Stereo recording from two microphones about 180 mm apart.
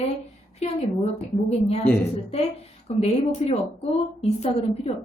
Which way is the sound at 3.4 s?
35° left (ahead or behind).